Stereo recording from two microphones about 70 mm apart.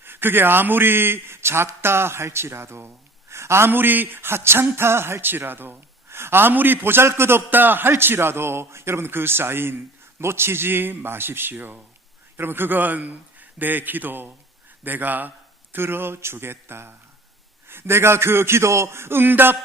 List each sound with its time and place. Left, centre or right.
0.0 s a man's voice: right